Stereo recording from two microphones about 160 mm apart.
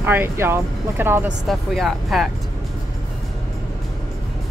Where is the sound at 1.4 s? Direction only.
Centre (ahead or behind).